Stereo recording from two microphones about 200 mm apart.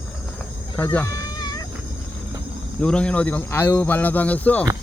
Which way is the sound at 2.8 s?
5° left (ahead or behind).